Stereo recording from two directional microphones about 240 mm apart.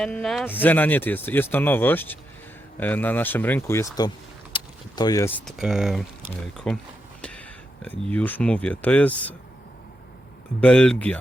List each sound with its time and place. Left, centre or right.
0.0 s speech: centre
4.5 s a sound: centre
5.5 s speech: centre
10.6 s speech: centre